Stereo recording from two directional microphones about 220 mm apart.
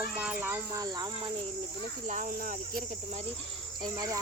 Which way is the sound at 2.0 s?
35° right (ahead or behind).